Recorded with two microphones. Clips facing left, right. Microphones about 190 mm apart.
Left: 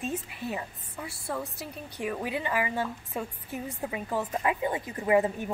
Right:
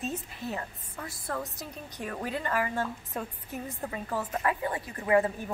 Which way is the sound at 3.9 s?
15° left (ahead or behind).